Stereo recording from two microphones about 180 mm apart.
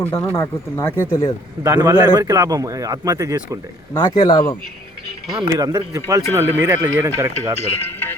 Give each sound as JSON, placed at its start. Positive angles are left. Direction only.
{"t": 0.2, "sound": "speech", "side_deg": 15}
{"t": 1.6, "sound": "speech", "side_deg": -15}
{"t": 3.9, "sound": "speech", "side_deg": 25}
{"t": 5.4, "sound": "speech", "side_deg": -20}
{"t": 7.8, "sound": "speech", "side_deg": 10}